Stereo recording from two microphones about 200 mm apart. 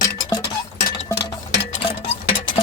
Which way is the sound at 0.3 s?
20° left (ahead or behind).